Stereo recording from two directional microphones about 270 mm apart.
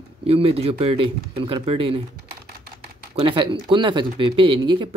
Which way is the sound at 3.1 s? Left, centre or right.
Centre.